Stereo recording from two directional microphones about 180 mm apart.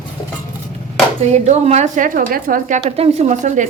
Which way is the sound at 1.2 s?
40° right (ahead or behind).